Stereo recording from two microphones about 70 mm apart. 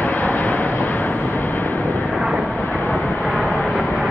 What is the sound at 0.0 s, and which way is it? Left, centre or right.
Vehicle, left.